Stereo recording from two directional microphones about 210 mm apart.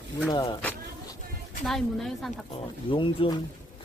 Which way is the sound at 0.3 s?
20° left (ahead or behind).